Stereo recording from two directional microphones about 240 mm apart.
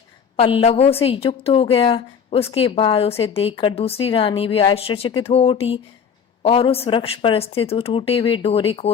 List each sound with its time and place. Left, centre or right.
0.3 s a woman's voice: left